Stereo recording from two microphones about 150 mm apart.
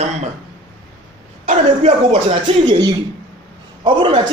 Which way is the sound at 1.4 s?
45° right (ahead or behind).